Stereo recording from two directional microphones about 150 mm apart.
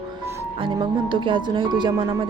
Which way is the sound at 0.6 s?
35° right (ahead or behind).